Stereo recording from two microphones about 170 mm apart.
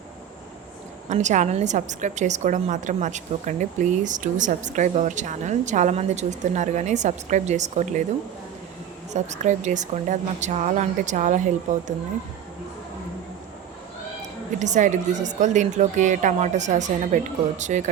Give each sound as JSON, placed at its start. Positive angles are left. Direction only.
{"t": 1.1, "sound": "a woman's voice", "side_deg": -45}
{"t": 9.1, "sound": "a woman's voice", "side_deg": -45}
{"t": 14.6, "sound": "a woman's voice", "side_deg": -45}